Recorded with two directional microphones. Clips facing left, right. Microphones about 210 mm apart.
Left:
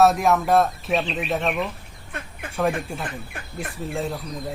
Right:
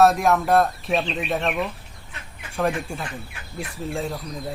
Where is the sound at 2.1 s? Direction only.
55° left (ahead or behind).